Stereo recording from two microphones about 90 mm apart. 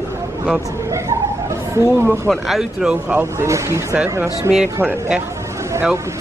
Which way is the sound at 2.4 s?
5° right (ahead or behind).